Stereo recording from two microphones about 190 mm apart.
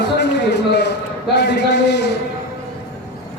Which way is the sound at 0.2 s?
60° left (ahead or behind).